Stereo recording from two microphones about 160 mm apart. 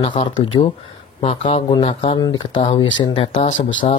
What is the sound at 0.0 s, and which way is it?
Speech, 35° left (ahead or behind).